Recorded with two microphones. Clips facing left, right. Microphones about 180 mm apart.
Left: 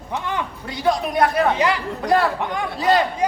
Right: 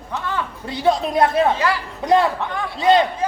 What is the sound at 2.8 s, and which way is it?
Speech, 25° right (ahead or behind).